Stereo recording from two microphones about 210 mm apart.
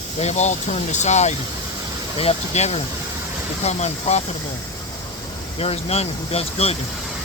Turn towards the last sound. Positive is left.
turn(degrees=30)  # may be behind; listen again after turning